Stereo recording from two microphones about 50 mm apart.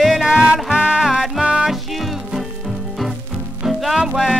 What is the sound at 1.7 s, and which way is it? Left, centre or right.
Music, centre.